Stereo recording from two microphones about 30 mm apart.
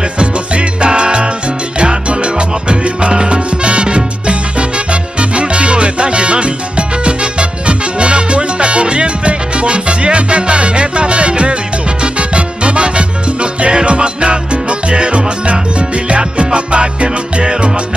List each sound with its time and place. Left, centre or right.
0.2 s music: right
5.3 s salsa music: right
7.1 s music: right